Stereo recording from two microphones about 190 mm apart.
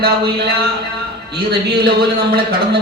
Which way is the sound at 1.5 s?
60° right (ahead or behind).